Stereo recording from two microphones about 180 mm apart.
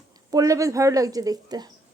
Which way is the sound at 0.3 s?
20° right (ahead or behind).